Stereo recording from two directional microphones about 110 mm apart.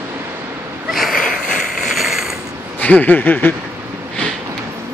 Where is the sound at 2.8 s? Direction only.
15° left (ahead or behind).